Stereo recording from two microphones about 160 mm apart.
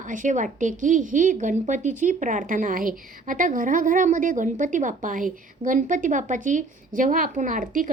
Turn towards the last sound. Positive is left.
turn(degrees=-55)  # may be behind; listen again after turning